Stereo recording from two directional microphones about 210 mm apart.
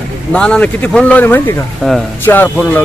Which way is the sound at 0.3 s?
5° left (ahead or behind).